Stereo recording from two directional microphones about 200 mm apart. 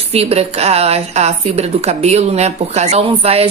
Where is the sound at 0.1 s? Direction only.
30° right (ahead or behind).